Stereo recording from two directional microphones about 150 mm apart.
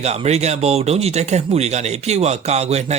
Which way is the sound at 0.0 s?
45° right (ahead or behind).